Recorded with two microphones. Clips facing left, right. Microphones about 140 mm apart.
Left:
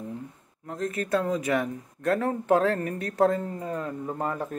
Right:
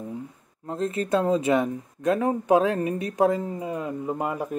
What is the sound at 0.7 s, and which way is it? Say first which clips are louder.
Speech: right 3 dB; 30° right (ahead or behind).